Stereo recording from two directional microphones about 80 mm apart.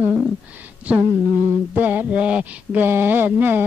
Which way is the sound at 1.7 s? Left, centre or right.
Right.